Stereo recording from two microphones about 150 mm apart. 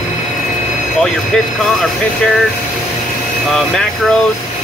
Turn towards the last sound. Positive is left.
turn(degrees=0)  # may be behind; listen again after turning